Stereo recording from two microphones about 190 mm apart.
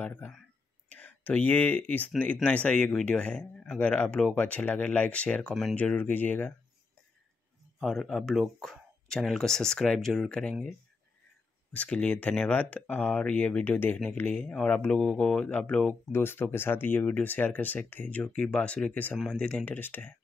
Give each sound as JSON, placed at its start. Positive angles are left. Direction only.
{"t": 0.0, "sound": "speech", "side_deg": 10}
{"t": 7.8, "sound": "speech", "side_deg": 0}
{"t": 11.7, "sound": "speech", "side_deg": 5}